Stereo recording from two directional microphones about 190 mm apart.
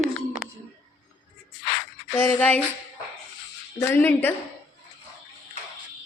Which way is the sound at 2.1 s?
10° left (ahead or behind).